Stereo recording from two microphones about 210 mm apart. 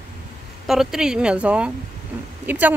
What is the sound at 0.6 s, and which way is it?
A woman's voice, centre (ahead or behind).